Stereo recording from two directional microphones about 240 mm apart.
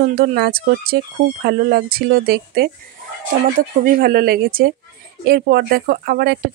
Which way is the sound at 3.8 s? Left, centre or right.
Right.